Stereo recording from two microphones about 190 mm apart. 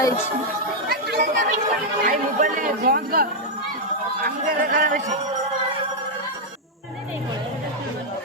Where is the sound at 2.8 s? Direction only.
55° right (ahead or behind).